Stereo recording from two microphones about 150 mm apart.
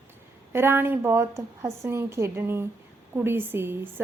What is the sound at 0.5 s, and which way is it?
A woman's voice, 15° right (ahead or behind).